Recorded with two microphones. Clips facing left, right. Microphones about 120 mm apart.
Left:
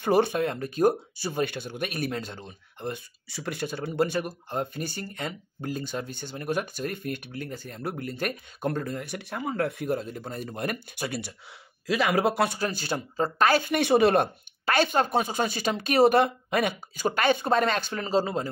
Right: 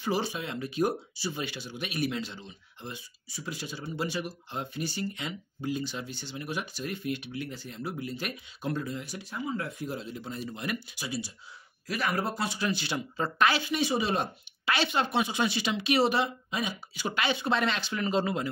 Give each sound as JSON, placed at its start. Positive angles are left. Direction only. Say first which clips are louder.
{"t": 0.0, "sound": "speech", "louder": "left 8 dB", "side_deg": 55}
{"t": 11.9, "sound": "speech", "louder": "left 7 dB", "side_deg": 90}
{"t": 12.4, "sound": "speech", "louder": "left 2 dB", "side_deg": 45}
{"t": 18.0, "sound": "speech", "louder": "left 2 dB", "side_deg": 35}